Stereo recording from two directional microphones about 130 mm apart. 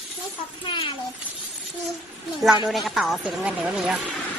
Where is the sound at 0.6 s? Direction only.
40° left (ahead or behind).